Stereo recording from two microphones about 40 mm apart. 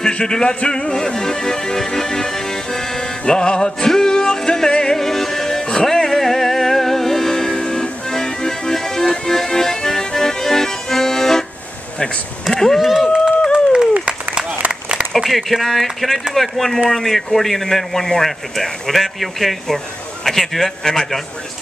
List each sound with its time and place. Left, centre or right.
0.0 s music: left
12.4 s a man's voice: centre
13.5 s a sound: right
15.1 s a man's voice: centre